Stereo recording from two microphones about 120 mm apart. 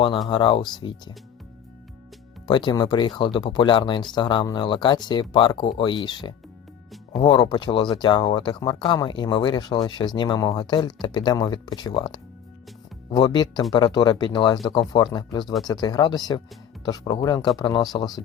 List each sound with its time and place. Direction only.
0.3 s speech: 45° left (ahead or behind)
2.5 s speech: 40° left (ahead or behind)